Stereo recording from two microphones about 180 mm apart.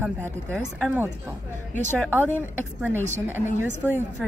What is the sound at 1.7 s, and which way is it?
Speech, 10° left (ahead or behind).